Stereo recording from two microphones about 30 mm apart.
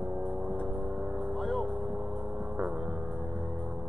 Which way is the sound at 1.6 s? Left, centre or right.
Right.